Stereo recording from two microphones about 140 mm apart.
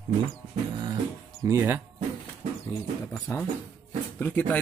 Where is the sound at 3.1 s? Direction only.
10° left (ahead or behind).